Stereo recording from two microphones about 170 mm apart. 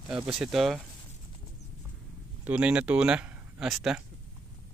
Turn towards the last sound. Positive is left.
turn(degrees=0)  # may be behind; listen again after turning